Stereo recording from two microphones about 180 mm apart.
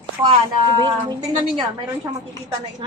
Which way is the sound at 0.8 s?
20° right (ahead or behind).